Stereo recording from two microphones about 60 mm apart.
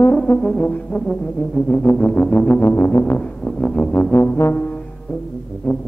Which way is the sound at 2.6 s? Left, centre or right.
Left.